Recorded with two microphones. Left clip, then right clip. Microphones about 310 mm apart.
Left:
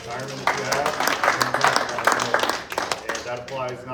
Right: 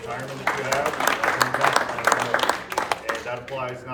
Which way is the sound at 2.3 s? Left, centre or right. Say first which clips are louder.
Left 1 dB; left.